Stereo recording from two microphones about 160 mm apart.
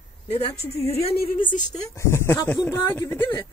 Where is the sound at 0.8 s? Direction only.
40° left (ahead or behind).